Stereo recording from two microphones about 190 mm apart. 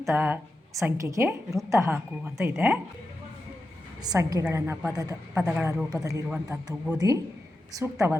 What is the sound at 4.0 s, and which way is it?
Speech, 20° right (ahead or behind).